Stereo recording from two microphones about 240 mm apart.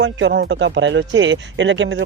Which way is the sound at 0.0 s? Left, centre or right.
Right.